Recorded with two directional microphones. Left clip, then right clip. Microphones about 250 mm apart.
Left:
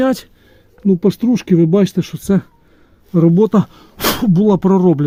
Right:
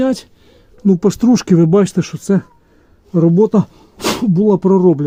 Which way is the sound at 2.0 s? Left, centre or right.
Centre.